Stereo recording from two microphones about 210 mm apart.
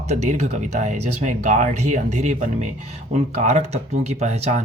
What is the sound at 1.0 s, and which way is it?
Speech, 90° right.